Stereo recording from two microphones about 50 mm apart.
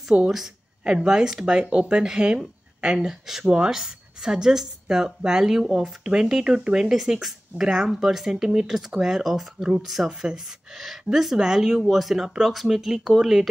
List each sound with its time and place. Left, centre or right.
0.1 s speech: centre
3.4 s speech: right
7.9 s speech: centre